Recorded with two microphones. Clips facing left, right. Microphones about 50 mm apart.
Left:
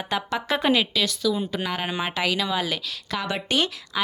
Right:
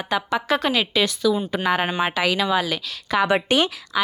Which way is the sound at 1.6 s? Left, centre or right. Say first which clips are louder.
Right 6 dB; centre.